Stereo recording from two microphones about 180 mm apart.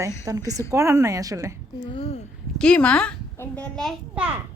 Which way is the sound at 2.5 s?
5° left (ahead or behind).